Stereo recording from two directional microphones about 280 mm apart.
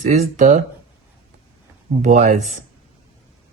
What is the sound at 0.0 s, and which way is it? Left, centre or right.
Speech, right.